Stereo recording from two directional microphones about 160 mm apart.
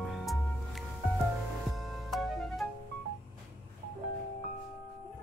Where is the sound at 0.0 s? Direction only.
Centre (ahead or behind).